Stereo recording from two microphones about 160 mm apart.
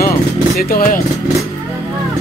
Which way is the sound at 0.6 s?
65° left (ahead or behind).